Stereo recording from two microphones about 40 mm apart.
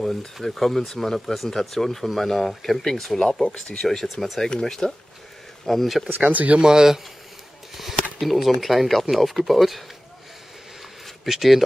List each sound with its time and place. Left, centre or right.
0.0 s speech: centre
4.1 s speech: centre
4.4 s speech: centre
5.7 s speech: centre
6.2 s speech: right
6.6 s speech: centre
7.7 s speech: centre
11.2 s speech: centre